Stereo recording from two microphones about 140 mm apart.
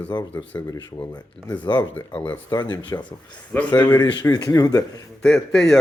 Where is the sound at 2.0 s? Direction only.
15° left (ahead or behind).